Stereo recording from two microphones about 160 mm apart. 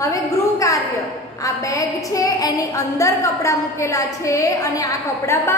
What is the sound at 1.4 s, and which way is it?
A woman's voice, 20° left (ahead or behind).